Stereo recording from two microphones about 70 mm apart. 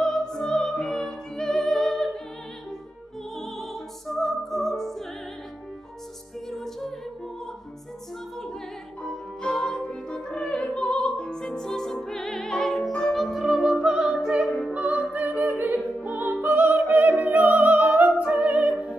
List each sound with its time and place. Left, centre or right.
0.0 s music: centre
4.1 s music: centre
6.5 s music: centre
9.0 s music: centre
14.7 s opera: centre